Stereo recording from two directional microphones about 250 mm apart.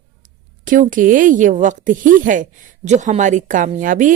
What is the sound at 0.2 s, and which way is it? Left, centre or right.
A woman's voice, right.